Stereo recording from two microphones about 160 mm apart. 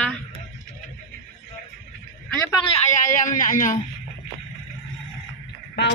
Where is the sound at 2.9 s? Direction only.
55° left (ahead or behind).